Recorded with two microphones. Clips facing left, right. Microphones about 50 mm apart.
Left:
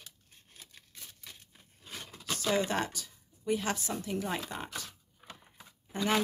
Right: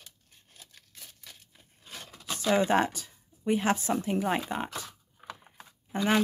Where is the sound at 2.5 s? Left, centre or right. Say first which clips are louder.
Right 9 dB; right.